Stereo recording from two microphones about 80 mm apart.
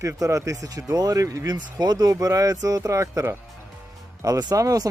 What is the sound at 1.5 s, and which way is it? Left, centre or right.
Speech, right.